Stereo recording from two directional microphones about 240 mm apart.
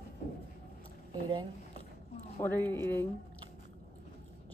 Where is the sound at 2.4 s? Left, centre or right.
Centre.